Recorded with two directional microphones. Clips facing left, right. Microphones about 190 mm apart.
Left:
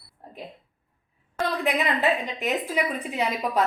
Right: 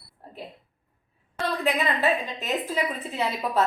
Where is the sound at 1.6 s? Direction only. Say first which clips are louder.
Even; 15° left (ahead or behind).